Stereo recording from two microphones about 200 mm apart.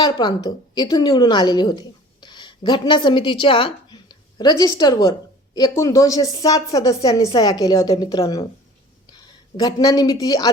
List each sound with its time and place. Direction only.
0.0 s a woman's voice: 20° left (ahead or behind)